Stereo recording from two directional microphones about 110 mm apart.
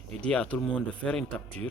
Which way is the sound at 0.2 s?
10° left (ahead or behind).